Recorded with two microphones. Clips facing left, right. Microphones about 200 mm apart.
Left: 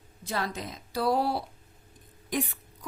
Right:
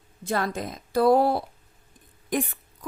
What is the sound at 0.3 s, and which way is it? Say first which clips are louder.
A woman's voice: right 5 dB; 50° right (ahead or behind).